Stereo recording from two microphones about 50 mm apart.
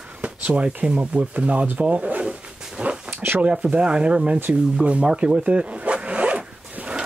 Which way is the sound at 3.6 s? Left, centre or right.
Centre.